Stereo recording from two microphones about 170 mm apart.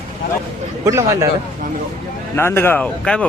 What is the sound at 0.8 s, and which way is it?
Speech, 20° right (ahead or behind).